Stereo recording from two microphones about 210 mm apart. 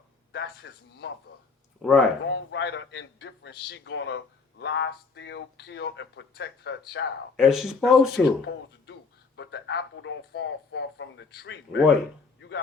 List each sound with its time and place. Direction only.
0.3 s speech: 55° left (ahead or behind)
1.8 s speech: centre (ahead or behind)
2.2 s speech: 60° left (ahead or behind)
7.3 s speech: centre (ahead or behind)
8.9 s speech: 55° left (ahead or behind)